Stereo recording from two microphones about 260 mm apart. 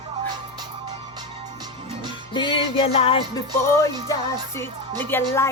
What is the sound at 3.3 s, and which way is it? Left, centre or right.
Speech, centre.